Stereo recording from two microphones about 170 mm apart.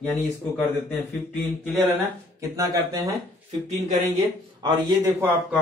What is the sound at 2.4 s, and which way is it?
Speech, 20° right (ahead or behind).